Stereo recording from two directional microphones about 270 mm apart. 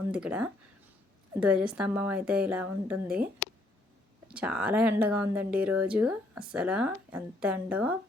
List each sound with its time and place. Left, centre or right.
0.1 s speech: centre